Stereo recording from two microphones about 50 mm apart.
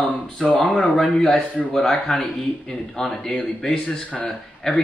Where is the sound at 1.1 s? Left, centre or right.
Centre.